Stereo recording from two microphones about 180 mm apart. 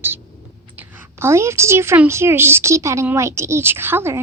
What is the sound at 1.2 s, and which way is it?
A woman's voice, 15° right (ahead or behind).